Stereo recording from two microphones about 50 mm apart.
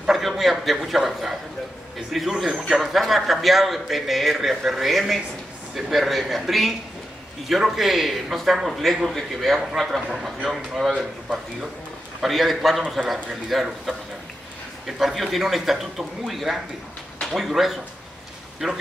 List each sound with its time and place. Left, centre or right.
0.1 s a man's voice: centre
12.2 s a man's voice: centre